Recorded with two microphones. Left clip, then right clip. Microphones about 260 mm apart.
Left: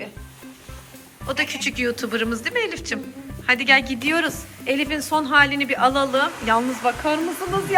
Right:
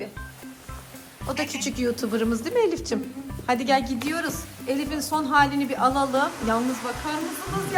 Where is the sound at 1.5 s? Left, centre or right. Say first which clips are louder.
Left 3 dB; centre.